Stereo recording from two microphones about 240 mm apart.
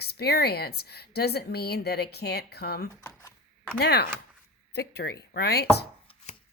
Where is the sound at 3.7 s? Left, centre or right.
Left.